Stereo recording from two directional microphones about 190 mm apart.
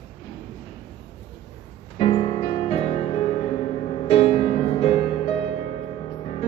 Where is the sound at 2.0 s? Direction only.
30° left (ahead or behind).